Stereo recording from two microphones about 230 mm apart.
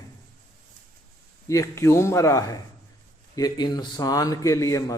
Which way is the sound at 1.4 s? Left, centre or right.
Centre.